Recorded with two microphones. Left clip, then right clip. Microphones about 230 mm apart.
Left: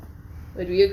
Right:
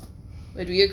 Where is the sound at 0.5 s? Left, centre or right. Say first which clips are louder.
Left 1 dB; right.